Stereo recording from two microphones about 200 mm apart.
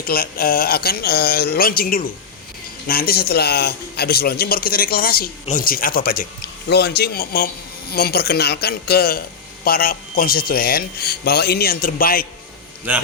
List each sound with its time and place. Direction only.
0.0 s a man's voice: 50° left (ahead or behind)